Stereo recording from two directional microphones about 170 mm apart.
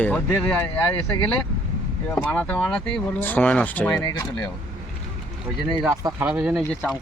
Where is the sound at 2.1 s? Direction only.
10° left (ahead or behind).